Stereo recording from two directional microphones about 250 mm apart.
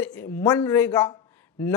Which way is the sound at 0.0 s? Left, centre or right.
Centre.